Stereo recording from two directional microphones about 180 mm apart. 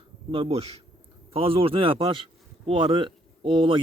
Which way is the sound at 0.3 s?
30° right (ahead or behind).